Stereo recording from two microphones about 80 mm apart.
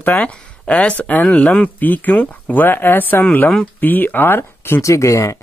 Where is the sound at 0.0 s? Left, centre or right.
Centre.